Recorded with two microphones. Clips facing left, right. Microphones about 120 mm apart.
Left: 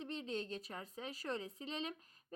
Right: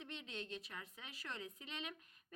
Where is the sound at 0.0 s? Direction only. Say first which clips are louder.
Left 7 dB; 35° left (ahead or behind).